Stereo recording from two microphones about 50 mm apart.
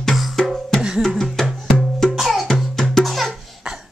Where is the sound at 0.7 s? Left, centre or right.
Centre.